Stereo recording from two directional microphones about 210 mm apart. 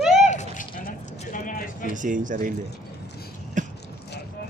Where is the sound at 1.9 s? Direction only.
40° right (ahead or behind).